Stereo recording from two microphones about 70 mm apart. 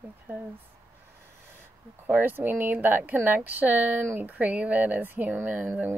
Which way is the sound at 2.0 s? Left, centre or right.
Right.